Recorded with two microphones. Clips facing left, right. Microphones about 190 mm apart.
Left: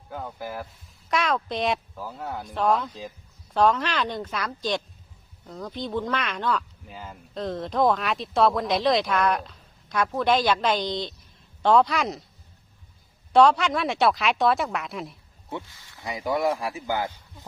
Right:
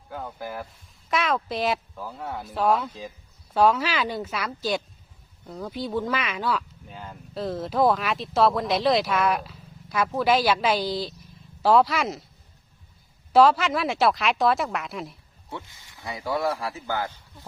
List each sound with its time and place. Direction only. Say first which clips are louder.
0.1 s a woman's voice: even; centre (ahead or behind)
13.3 s speech: even; 5° right (ahead or behind)
15.6 s speech: even; 20° right (ahead or behind)
16.0 s speech: left 2 dB; 15° left (ahead or behind)